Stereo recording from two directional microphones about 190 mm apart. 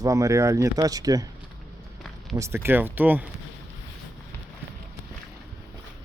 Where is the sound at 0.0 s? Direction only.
15° right (ahead or behind).